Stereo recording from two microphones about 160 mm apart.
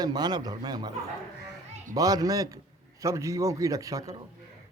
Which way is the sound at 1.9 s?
20° right (ahead or behind).